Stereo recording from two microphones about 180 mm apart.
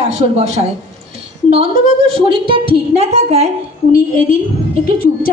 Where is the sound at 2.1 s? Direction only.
30° right (ahead or behind).